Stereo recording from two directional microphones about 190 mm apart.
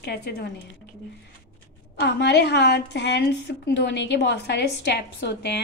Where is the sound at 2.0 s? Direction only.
65° left (ahead or behind).